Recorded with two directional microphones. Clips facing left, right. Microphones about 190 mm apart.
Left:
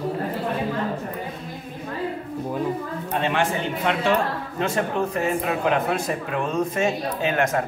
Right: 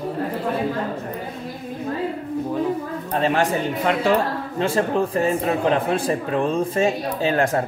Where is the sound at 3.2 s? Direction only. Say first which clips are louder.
Right 4 dB; 40° right (ahead or behind).